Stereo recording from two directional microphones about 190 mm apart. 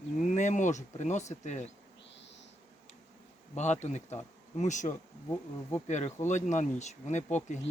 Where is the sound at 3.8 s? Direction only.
35° left (ahead or behind).